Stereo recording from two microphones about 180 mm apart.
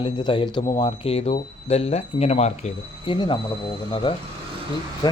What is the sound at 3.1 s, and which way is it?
Speech, 25° left (ahead or behind).